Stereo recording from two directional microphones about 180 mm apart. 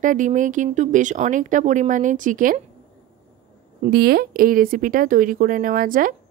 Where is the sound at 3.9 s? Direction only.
55° right (ahead or behind).